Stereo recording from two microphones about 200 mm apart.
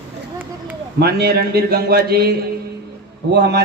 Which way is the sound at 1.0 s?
50° right (ahead or behind).